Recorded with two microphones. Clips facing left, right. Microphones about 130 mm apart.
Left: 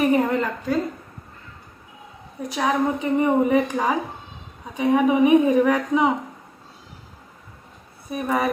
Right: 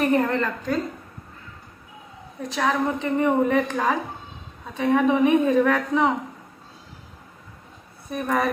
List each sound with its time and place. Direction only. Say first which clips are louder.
0.0 s a woman's voice: left 2 dB; 10° left (ahead or behind)
2.5 s a woman's voice: left 1 dB; 15° left (ahead or behind)
8.1 s a woman's voice: left 1 dB; 10° left (ahead or behind)